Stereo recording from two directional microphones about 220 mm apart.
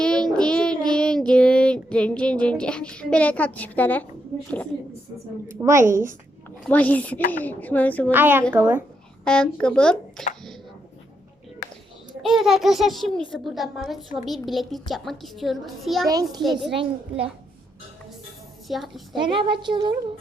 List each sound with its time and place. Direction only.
0.0 s child singing: 5° left (ahead or behind)
5.5 s a woman's voice: 15° right (ahead or behind)
6.7 s speech: 5° left (ahead or behind)
8.1 s a woman's voice: 10° right (ahead or behind)
9.2 s a woman's voice: 5° left (ahead or behind)
12.2 s a woman's voice: centre (ahead or behind)
16.7 s a child's voice: 25° right (ahead or behind)
18.7 s a woman's voice: centre (ahead or behind)
19.2 s a child's voice: 20° right (ahead or behind)